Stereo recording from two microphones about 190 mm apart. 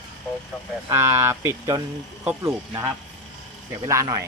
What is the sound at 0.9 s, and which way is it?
Speech, 15° right (ahead or behind).